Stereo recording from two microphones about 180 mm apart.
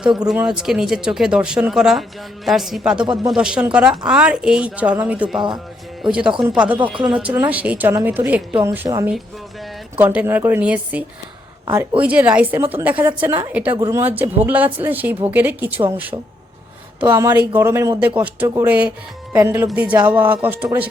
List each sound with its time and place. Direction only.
0.3 s a woman's voice: 5° right (ahead or behind)